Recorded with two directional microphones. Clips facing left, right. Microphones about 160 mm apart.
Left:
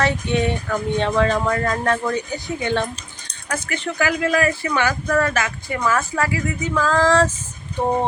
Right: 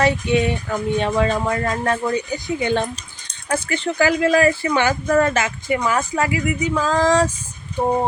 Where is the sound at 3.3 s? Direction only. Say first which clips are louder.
Right 4 dB; 30° right (ahead or behind).